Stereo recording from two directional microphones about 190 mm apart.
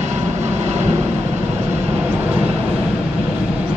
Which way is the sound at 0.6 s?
35° right (ahead or behind).